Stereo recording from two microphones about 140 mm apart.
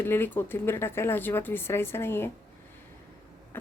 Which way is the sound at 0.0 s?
15° left (ahead or behind).